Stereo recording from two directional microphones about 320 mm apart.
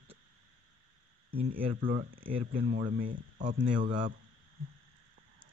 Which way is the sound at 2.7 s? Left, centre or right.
Right.